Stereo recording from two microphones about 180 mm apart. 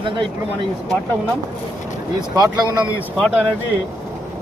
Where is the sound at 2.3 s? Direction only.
20° right (ahead or behind).